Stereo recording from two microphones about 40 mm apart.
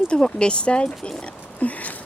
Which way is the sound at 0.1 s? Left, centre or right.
Left.